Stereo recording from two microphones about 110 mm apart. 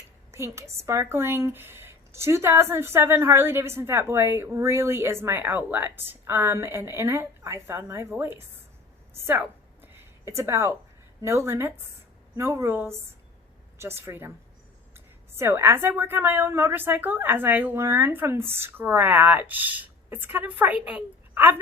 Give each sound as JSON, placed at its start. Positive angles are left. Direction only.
{"t": 0.3, "sound": "speech", "side_deg": -25}
{"t": 9.8, "sound": "a sound", "side_deg": -25}
{"t": 11.2, "sound": "speech", "side_deg": -25}